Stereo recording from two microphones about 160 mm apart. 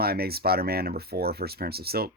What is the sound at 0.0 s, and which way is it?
Speech, 75° right (ahead or behind).